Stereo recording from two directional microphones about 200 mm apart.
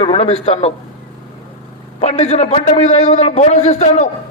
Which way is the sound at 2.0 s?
35° left (ahead or behind).